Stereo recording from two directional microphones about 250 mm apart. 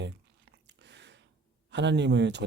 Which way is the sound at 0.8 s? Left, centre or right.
Right.